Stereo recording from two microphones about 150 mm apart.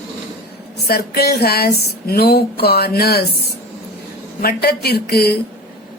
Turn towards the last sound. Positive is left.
turn(degrees=90)